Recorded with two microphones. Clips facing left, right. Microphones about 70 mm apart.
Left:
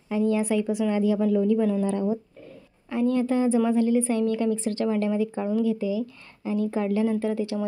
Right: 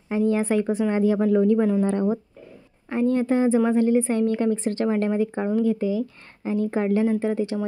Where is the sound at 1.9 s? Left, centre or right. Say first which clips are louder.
Right 3 dB; right.